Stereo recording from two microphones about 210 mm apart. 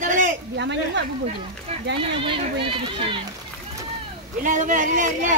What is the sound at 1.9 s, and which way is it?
Speech, 25° right (ahead or behind).